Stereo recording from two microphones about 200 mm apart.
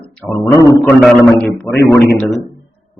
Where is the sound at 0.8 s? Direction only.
Centre (ahead or behind).